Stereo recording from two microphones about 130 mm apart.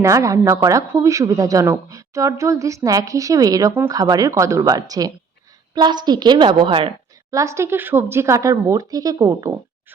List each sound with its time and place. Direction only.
0.0 s a woman's voice: 25° right (ahead or behind); by 6.9 s 40° right (ahead or behind)
7.3 s speech: 25° right (ahead or behind)